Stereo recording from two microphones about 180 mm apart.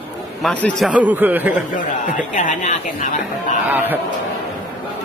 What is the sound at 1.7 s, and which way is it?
Speech, 45° left (ahead or behind).